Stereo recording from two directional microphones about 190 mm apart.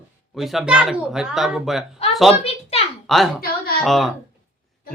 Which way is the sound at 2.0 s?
35° left (ahead or behind).